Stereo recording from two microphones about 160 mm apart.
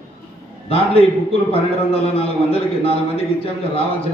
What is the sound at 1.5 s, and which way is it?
A man's voice, 40° left (ahead or behind).